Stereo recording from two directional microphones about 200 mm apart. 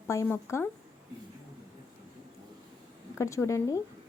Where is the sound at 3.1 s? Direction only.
15° left (ahead or behind).